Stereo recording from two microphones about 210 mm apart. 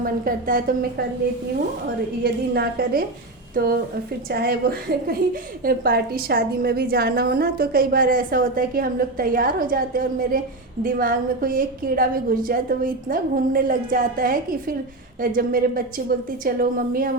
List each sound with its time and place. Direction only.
0.0 s a woman's voice: 40° right (ahead or behind)
2.2 s a woman's voice: 50° right (ahead or behind)